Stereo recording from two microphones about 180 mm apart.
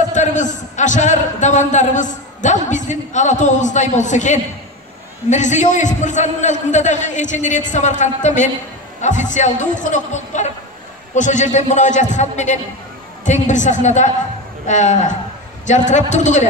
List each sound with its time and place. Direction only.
0.1 s a man's voice: 45° left (ahead or behind)